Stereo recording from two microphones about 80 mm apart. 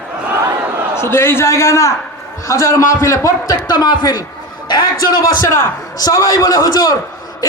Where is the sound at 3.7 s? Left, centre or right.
Left.